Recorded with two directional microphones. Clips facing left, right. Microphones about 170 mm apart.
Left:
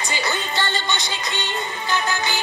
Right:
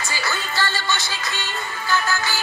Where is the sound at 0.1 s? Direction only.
20° left (ahead or behind).